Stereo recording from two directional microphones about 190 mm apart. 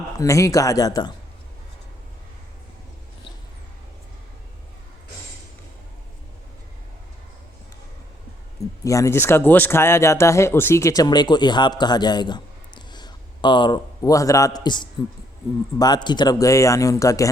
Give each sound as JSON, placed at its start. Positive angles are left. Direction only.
{"t": 0.2, "sound": "speech", "side_deg": 15}
{"t": 8.8, "sound": "speech", "side_deg": 15}